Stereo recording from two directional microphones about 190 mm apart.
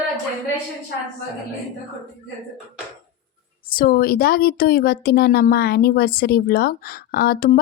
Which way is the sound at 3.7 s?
50° left (ahead or behind).